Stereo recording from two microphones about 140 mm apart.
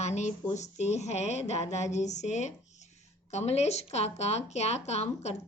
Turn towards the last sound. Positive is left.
turn(degrees=50)  # may be behind; listen again after turning